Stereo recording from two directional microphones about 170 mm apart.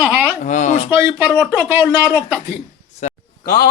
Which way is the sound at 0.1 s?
10° right (ahead or behind).